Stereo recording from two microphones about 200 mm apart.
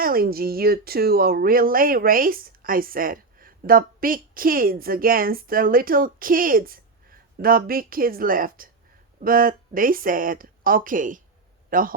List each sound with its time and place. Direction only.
0.0 s speech: 45° right (ahead or behind)